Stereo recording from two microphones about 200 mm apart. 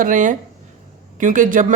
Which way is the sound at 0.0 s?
40° right (ahead or behind).